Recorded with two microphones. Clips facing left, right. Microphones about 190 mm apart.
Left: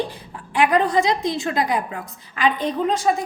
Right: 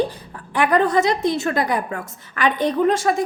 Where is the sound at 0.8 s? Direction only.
65° right (ahead or behind).